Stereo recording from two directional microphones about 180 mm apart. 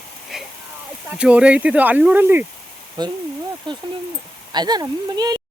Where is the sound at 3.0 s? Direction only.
25° right (ahead or behind).